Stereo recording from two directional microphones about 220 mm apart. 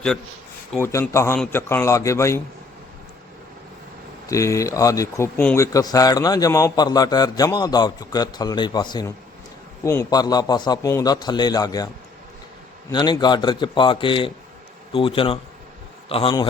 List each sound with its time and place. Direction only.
0.7 s a man's voice: 10° left (ahead or behind)
4.3 s a man's voice: 15° left (ahead or behind)
12.9 s a man's voice: 20° left (ahead or behind)